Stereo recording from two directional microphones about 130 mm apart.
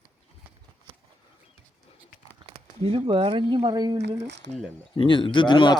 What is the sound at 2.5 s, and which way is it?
Speech, 50° right (ahead or behind).